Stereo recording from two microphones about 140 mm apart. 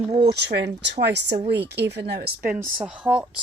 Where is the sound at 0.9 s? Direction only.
40° right (ahead or behind).